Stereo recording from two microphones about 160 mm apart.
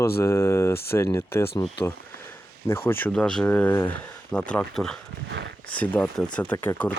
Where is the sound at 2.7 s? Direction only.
15° left (ahead or behind).